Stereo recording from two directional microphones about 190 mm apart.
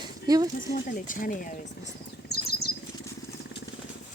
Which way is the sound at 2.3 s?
55° left (ahead or behind).